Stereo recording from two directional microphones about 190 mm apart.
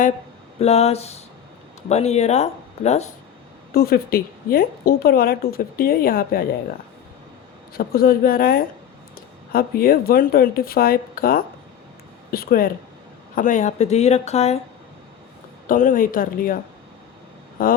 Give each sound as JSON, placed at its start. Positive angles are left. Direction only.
{"t": 0.6, "sound": "speech", "side_deg": 35}
{"t": 3.7, "sound": "speech", "side_deg": 55}
{"t": 7.7, "sound": "speech", "side_deg": 50}
{"t": 15.6, "sound": "speech", "side_deg": 45}
{"t": 17.6, "sound": "speech", "side_deg": 50}